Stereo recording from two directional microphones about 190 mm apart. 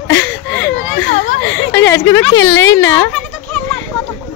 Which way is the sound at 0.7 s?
75° left (ahead or behind).